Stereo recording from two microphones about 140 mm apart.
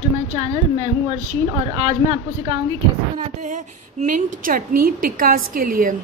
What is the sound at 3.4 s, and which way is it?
A woman's voice, 65° right (ahead or behind).